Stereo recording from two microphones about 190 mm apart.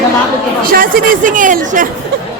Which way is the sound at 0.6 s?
50° right (ahead or behind).